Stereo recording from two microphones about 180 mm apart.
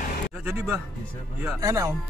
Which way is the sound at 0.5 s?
15° right (ahead or behind).